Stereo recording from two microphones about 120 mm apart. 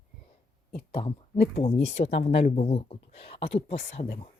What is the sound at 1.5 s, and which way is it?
Speech, 60° left (ahead or behind).